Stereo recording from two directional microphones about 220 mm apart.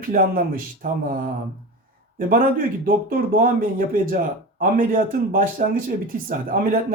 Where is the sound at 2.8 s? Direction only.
40° right (ahead or behind).